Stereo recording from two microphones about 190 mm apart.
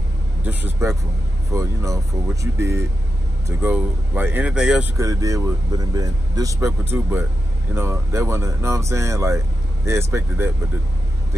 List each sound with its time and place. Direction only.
0.8 s speech: 15° right (ahead or behind)
4.9 s speech: 15° right (ahead or behind)